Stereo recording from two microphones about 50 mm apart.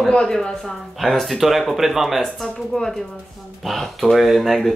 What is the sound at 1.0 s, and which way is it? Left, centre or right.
Speech, centre.